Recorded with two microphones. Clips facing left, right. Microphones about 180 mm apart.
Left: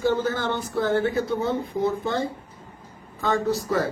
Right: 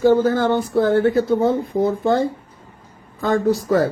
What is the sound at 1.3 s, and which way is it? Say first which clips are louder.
Speech: right 7 dB; 25° right (ahead or behind).